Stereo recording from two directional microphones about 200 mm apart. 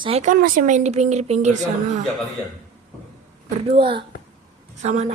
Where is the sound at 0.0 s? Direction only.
30° right (ahead or behind).